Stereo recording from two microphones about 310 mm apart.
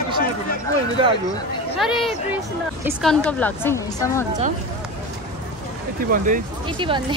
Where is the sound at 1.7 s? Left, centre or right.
Centre.